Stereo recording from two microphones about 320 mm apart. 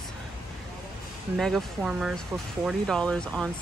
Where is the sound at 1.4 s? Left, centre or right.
Centre.